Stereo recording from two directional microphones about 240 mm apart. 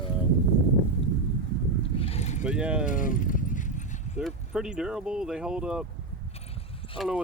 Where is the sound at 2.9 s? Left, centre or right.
Left.